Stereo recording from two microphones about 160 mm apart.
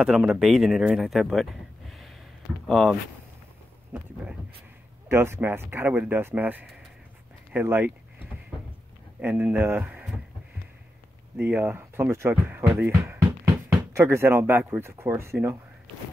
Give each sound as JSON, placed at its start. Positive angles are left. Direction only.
{"t": 0.0, "sound": "speech", "side_deg": -5}
{"t": 5.0, "sound": "speech", "side_deg": -15}
{"t": 7.5, "sound": "a sound", "side_deg": -10}
{"t": 9.2, "sound": "speech", "side_deg": -10}
{"t": 11.3, "sound": "speech", "side_deg": -10}